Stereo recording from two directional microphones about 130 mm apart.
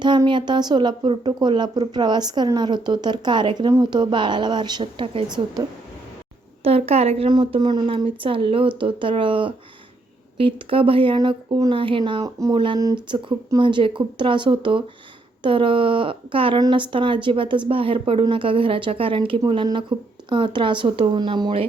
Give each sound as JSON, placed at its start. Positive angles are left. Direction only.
{"t": 0.3, "sound": "speech", "side_deg": -35}
{"t": 6.7, "sound": "a woman's voice", "side_deg": -50}
{"t": 7.3, "sound": "speech", "side_deg": -40}
{"t": 12.2, "sound": "speech", "side_deg": -25}
{"t": 12.5, "sound": "speech", "side_deg": -40}
{"t": 12.8, "sound": "speech", "side_deg": -25}
{"t": 13.6, "sound": "speech", "side_deg": -40}